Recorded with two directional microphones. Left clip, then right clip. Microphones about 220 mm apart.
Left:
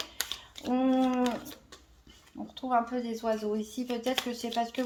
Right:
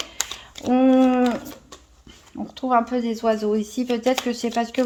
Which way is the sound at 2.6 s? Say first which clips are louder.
Right 9 dB; 40° right (ahead or behind).